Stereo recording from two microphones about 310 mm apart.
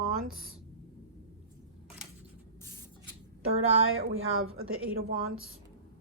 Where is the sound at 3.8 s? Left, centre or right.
Right.